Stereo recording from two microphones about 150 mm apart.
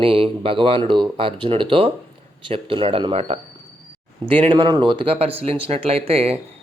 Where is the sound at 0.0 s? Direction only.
40° right (ahead or behind).